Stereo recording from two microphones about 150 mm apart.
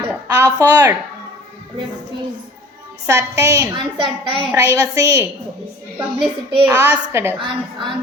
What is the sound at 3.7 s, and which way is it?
Speech, 35° right (ahead or behind).